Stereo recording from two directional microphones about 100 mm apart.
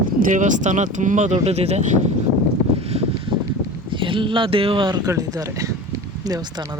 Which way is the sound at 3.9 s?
55° right (ahead or behind).